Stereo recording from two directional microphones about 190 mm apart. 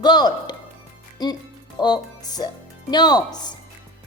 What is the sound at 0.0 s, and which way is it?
Speech, 20° left (ahead or behind).